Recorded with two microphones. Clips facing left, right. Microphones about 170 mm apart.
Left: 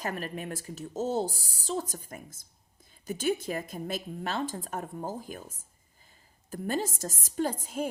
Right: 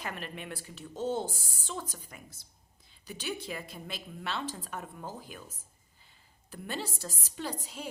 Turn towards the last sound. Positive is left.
turn(degrees=50)  # may be behind; listen again after turning